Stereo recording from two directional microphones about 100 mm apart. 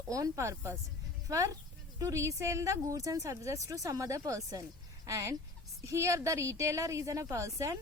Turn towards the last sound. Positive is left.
turn(degrees=-30)  # may be behind; listen again after turning